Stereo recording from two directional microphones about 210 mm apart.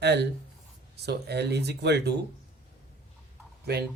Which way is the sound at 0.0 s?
55° right (ahead or behind).